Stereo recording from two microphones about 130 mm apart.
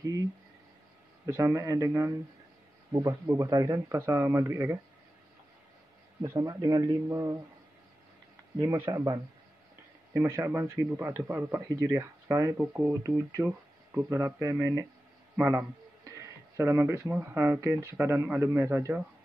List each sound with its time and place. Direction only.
1.2 s speech: 25° right (ahead or behind)
6.2 s speech: 30° right (ahead or behind)
8.8 s a man's voice: 30° right (ahead or behind)
12.5 s speech: 10° right (ahead or behind)
13.4 s speech: 20° right (ahead or behind)